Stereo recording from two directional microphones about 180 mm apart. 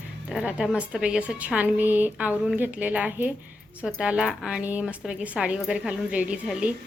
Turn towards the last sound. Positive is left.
turn(degrees=-5)  # may be behind; listen again after turning